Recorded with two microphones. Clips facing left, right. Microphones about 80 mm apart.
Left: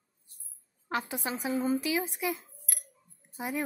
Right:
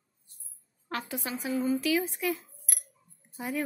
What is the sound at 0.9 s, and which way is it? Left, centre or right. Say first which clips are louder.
A woman's voice: left 2 dB; left.